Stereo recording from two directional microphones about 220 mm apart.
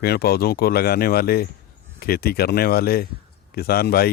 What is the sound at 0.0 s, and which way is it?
Speech, 45° left (ahead or behind).